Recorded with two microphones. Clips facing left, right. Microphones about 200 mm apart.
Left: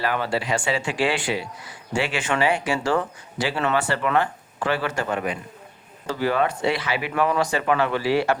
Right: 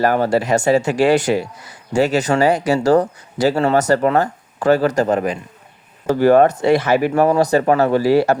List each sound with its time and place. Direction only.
0.0 s speech: 45° right (ahead or behind)
6.1 s speech: 50° right (ahead or behind)